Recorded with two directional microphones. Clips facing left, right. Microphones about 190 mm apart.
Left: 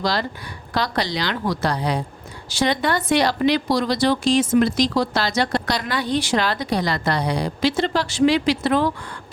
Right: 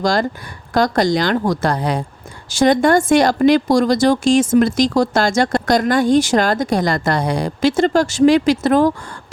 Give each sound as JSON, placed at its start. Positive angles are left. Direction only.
{"t": 0.0, "sound": "speech", "side_deg": -45}